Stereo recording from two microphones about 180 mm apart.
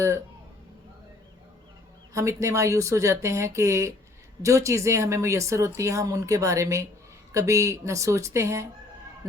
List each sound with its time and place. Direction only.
2.1 s speech: 15° right (ahead or behind)